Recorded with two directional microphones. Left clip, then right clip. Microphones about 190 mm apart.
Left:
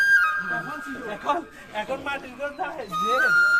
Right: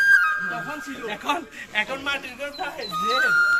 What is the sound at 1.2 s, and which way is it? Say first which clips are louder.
Speech: left 1 dB; 45° left (ahead or behind).